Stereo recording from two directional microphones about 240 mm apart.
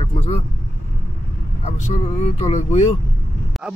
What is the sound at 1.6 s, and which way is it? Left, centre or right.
A man's voice, left.